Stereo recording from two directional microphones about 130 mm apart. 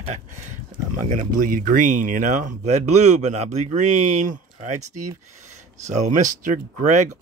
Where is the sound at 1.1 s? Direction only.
90° right.